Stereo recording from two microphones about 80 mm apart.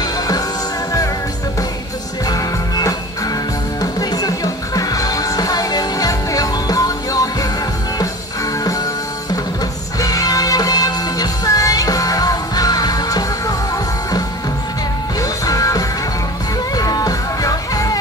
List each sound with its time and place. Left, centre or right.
2.2 s music: left
9.9 s music: left
15.1 s music: left